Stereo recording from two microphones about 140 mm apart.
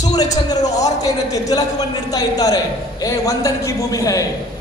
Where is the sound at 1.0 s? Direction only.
25° left (ahead or behind).